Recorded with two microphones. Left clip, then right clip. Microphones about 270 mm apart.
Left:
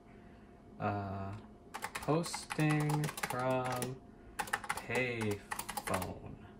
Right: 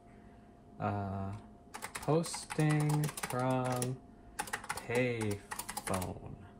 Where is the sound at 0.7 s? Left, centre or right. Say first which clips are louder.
Even; centre.